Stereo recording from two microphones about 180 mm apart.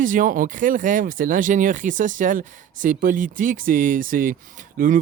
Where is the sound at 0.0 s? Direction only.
50° right (ahead or behind).